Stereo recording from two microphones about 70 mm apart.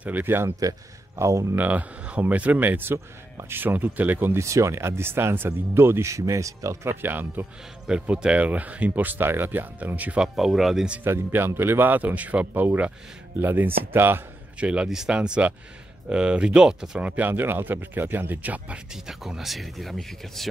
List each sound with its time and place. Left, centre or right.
0.0 s speech: right
0.6 s speech: right
1.5 s speech: right
4.4 s speech: right
6.9 s speech: right
7.8 s speech: centre
10.2 s speech: centre
11.1 s speech: right
14.6 s speech: centre
17.0 s speech: right
18.9 s speech: centre